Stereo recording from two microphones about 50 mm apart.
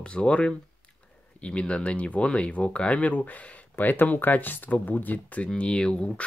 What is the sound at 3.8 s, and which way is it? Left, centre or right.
Speech, left.